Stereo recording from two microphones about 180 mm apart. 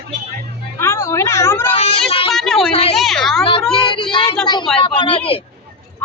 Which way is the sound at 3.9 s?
25° left (ahead or behind).